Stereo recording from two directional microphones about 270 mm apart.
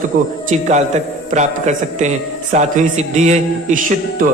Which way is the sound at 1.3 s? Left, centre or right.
Right.